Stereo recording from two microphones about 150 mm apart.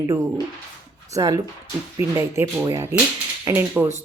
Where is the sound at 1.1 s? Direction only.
20° right (ahead or behind).